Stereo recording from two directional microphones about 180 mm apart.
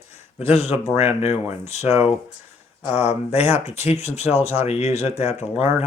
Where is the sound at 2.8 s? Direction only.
35° left (ahead or behind).